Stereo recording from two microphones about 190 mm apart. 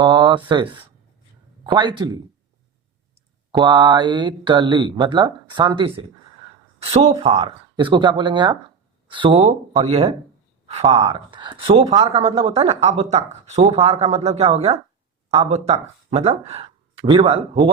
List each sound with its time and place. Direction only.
0.0 s speech: 25° right (ahead or behind)
3.5 s speech: 25° right (ahead or behind)